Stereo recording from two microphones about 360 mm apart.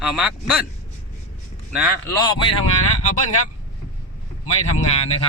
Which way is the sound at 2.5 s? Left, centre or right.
Left.